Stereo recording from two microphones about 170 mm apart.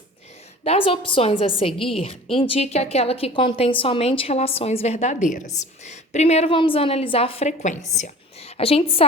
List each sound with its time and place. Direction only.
0.6 s a woman's voice: 35° left (ahead or behind)